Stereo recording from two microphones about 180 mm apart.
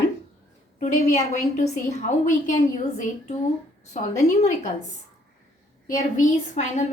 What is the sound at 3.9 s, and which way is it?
Speech, 40° left (ahead or behind).